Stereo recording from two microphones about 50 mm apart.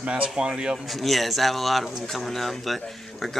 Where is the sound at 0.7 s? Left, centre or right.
Centre.